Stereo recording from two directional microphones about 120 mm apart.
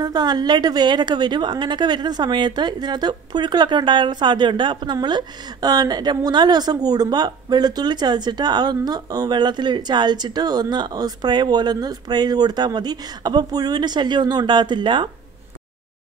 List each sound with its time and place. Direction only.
0.0 s a woman's voice: 35° right (ahead or behind)